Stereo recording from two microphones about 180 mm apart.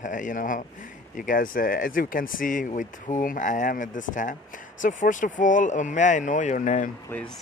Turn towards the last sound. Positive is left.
turn(degrees=45)  # may be behind; listen again after turning